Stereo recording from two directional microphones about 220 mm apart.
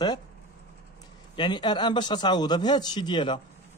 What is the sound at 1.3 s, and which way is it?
Speech, 20° left (ahead or behind).